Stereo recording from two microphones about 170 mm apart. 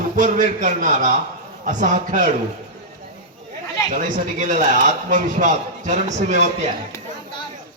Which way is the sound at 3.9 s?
50° right (ahead or behind).